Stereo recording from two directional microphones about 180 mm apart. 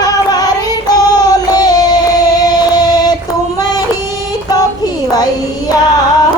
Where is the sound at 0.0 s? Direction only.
20° left (ahead or behind).